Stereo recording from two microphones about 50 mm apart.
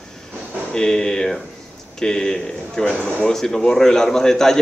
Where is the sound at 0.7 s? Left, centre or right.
Centre.